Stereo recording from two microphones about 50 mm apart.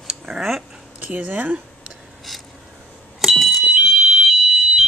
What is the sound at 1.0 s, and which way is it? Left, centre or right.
Speech, right.